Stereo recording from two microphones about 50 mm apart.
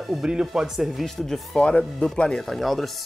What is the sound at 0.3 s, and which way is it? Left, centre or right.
Speech, centre.